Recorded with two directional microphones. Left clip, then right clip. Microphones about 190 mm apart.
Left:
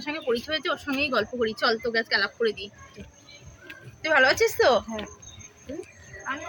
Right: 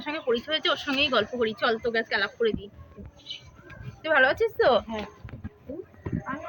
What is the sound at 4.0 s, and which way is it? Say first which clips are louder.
Speech: left 2 dB; 25° left (ahead or behind).